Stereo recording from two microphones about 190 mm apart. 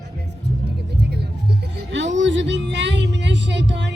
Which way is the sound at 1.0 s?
60° right (ahead or behind).